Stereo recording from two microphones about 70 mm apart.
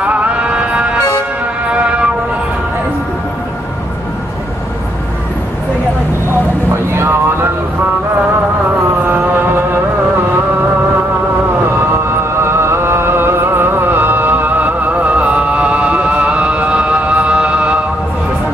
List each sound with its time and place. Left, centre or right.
0.0 s music: centre
6.9 s a sound: right
9.0 s mantra: right
11.9 s music: right; by 17.7 s centre